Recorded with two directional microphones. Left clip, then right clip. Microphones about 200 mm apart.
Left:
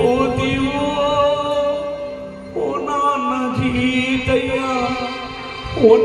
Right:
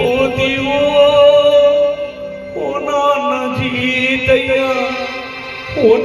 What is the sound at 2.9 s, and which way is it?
Music, 50° left (ahead or behind).